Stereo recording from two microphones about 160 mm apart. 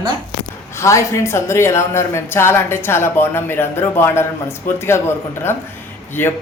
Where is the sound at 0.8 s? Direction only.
20° left (ahead or behind).